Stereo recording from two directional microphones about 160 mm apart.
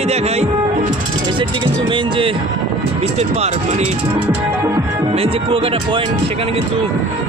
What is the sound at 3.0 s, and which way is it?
Speech, 40° right (ahead or behind).